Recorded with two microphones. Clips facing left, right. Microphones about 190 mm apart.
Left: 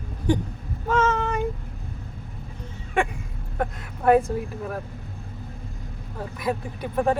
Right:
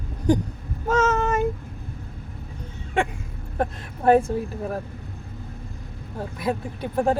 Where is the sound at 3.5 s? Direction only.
30° right (ahead or behind).